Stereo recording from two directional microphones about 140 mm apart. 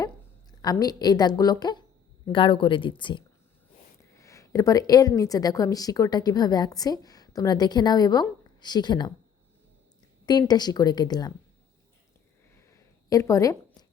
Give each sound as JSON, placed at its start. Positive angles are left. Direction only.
{"t": 0.6, "sound": "a woman's voice", "side_deg": 30}
{"t": 4.2, "sound": "a woman's voice", "side_deg": 20}
{"t": 10.2, "sound": "a woman's voice", "side_deg": 30}
{"t": 12.7, "sound": "a sound", "side_deg": 25}